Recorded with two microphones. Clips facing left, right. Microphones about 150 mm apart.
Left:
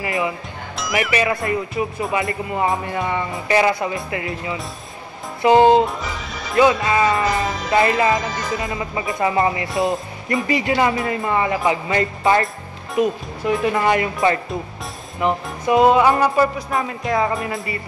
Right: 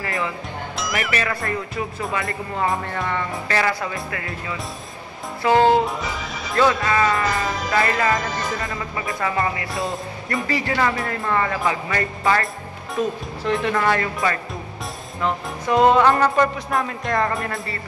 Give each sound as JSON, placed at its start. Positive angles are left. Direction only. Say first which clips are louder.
{"t": 0.0, "sound": "speech", "louder": "left 3 dB", "side_deg": 15}
{"t": 7.3, "sound": "music", "louder": "left 2 dB", "side_deg": 0}
{"t": 7.7, "sound": "speech", "louder": "left 4 dB", "side_deg": 20}
{"t": 13.5, "sound": "speech", "louder": "left 3 dB", "side_deg": 5}
{"t": 13.7, "sound": "speech", "louder": "left 3 dB", "side_deg": 15}
{"t": 15.7, "sound": "speech", "louder": "left 1 dB", "side_deg": 5}